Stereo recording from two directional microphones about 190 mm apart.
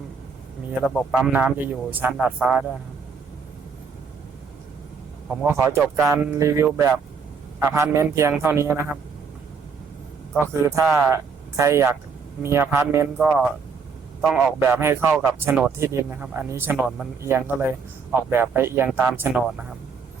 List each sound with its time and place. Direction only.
1.1 s speech: 10° right (ahead or behind)
5.4 s speech: 15° right (ahead or behind)
10.3 s speech: 15° right (ahead or behind)
14.2 s a man's voice: centre (ahead or behind)
14.4 s speech: 10° right (ahead or behind)